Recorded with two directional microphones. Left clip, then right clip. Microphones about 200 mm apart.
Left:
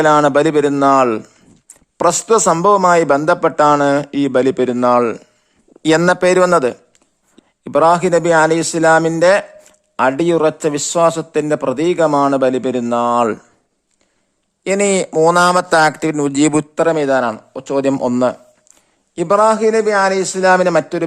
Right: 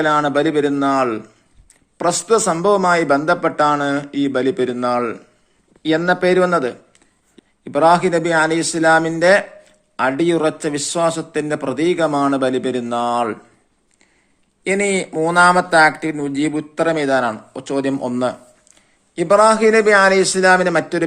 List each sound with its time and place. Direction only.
0.0 s speech: 55° left (ahead or behind)
14.6 s speech: 45° left (ahead or behind)